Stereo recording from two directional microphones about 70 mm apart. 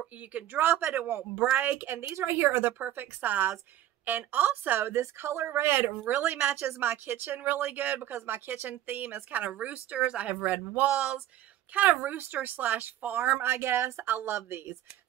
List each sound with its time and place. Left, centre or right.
0.3 s a woman's voice: right
13.4 s a woman's voice: right